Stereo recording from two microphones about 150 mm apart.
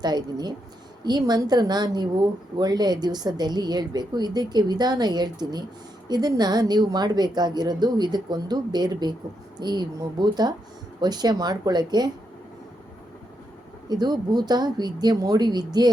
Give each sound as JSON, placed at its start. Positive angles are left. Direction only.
{"t": 0.0, "sound": "a woman's voice", "side_deg": -30}
{"t": 13.8, "sound": "a woman's voice", "side_deg": -30}